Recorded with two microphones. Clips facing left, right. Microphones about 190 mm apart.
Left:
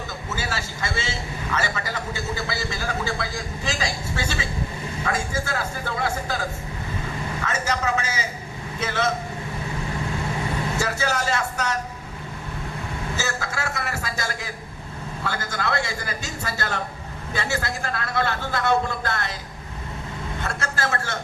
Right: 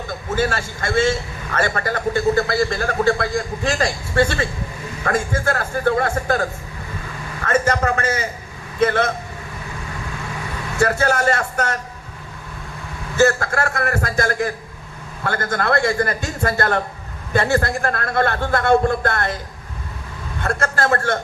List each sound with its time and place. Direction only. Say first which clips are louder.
0.1 s a man's voice: right 12 dB; 55° right (ahead or behind)
7.4 s a man's voice: right 8 dB; 55° right (ahead or behind)
10.8 s a man's voice: right 11 dB; 55° right (ahead or behind)
13.1 s a man's voice: right 15 dB; 55° right (ahead or behind)
20.4 s a man's voice: right 8 dB; 55° right (ahead or behind)